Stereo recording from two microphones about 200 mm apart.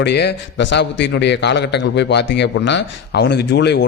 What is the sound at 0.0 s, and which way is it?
Speech, 55° left (ahead or behind).